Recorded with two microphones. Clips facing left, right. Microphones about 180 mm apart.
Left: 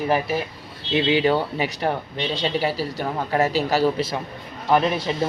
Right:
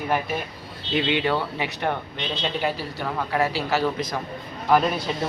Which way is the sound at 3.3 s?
40° left (ahead or behind).